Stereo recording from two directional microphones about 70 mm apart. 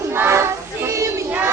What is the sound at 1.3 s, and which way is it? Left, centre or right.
Crowd, right.